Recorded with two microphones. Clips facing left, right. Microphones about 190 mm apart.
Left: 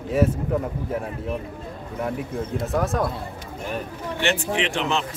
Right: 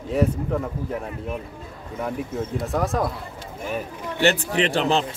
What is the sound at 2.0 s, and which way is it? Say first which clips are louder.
Speech: even; centre (ahead or behind).